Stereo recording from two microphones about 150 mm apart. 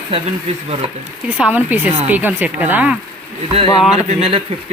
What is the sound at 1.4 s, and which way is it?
Speech, 10° right (ahead or behind).